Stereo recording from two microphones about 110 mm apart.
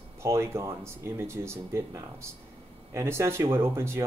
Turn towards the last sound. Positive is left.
turn(degrees=-25)  # may be behind; listen again after turning